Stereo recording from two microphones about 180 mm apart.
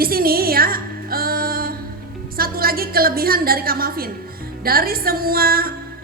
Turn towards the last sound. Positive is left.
turn(degrees=-55)  # may be behind; listen again after turning